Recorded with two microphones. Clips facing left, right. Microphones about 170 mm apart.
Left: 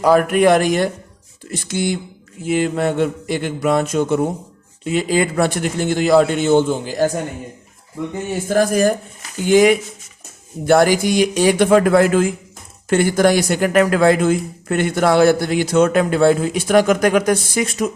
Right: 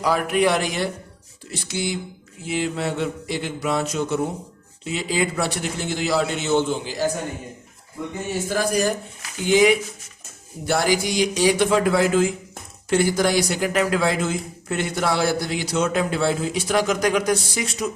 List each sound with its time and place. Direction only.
0.0 s a man's voice: 50° left (ahead or behind)
8.4 s a man's voice: 50° left (ahead or behind)